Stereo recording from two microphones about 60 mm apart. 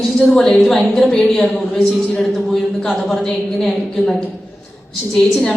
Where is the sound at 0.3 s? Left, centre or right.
Centre.